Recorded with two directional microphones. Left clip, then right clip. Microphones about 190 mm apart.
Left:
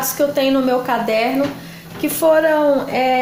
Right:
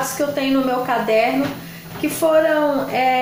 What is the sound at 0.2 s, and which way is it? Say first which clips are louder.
A woman's voice: left 5 dB; 45° left (ahead or behind).